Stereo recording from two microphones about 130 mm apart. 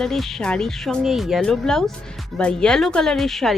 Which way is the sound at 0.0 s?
Centre (ahead or behind).